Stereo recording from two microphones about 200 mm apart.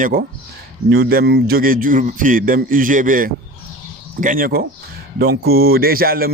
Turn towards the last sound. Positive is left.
turn(degrees=-50)  # may be behind; listen again after turning